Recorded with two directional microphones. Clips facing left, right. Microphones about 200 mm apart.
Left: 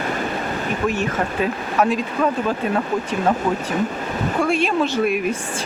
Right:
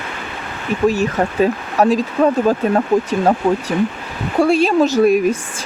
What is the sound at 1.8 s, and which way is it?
Speech, 35° right (ahead or behind).